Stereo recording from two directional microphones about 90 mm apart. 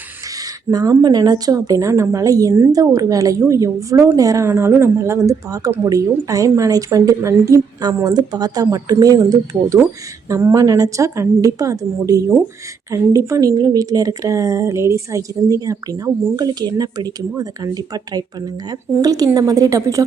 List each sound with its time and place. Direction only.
0.7 s a woman's voice: 45° right (ahead or behind)
4.4 s a woman's voice: 30° right (ahead or behind)